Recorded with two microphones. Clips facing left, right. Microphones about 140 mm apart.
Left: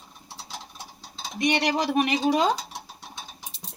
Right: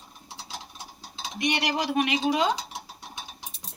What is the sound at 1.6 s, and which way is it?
Speech, 40° left (ahead or behind).